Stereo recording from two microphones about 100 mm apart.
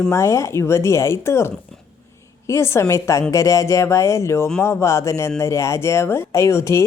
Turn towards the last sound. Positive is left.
turn(degrees=30)  # may be behind; listen again after turning